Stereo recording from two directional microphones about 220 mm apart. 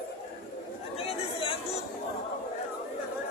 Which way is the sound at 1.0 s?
25° left (ahead or behind).